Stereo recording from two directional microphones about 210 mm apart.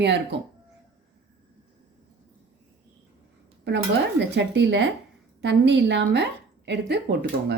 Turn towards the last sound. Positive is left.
turn(degrees=-50)  # may be behind; listen again after turning